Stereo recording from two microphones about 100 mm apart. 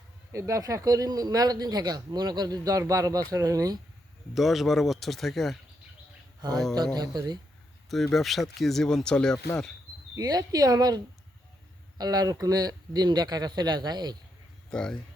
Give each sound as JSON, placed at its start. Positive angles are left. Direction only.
{"t": 0.3, "sound": "speech", "side_deg": -30}
{"t": 4.4, "sound": "speech", "side_deg": 0}
{"t": 6.9, "sound": "a man's voice", "side_deg": -45}
{"t": 8.1, "sound": "speech", "side_deg": 0}
{"t": 10.2, "sound": "a man's voice", "side_deg": -40}
{"t": 14.7, "sound": "speech", "side_deg": 10}